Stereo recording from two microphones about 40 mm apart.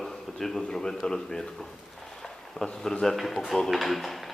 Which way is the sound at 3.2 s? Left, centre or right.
Centre.